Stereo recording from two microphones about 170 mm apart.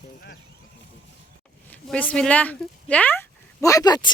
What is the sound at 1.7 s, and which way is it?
Speech, 10° left (ahead or behind).